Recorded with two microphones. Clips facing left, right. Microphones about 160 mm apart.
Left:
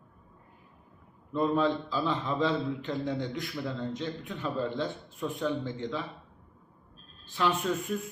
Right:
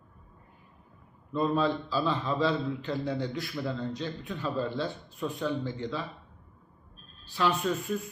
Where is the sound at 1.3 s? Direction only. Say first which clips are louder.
Even; 15° left (ahead or behind).